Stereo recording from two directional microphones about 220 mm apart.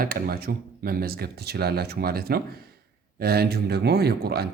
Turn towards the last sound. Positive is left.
turn(degrees=-45)  # may be behind; listen again after turning